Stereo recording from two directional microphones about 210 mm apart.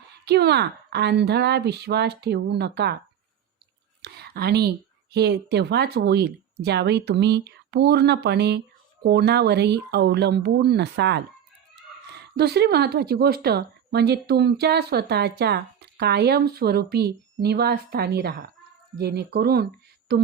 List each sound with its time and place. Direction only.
0.3 s a woman's voice: 55° right (ahead or behind)
4.0 s a woman's voice: 50° right (ahead or behind)